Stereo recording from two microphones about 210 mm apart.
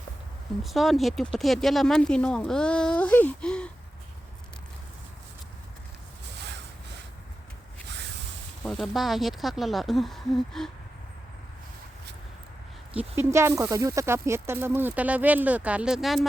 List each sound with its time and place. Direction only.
0.6 s speech: centre (ahead or behind)
6.2 s a sound: 55° right (ahead or behind)
8.7 s speech: centre (ahead or behind)
12.9 s speech: 10° right (ahead or behind)